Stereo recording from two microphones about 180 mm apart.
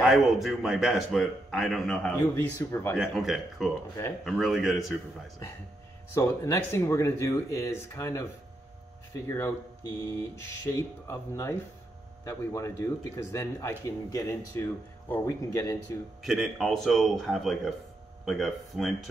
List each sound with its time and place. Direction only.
0.0 s a man's voice: centre (ahead or behind)
2.1 s speech: 15° left (ahead or behind)
3.0 s a man's voice: centre (ahead or behind)
6.1 s speech: 15° left (ahead or behind)
10.7 s speech: 15° left (ahead or behind)
16.2 s a man's voice: centre (ahead or behind)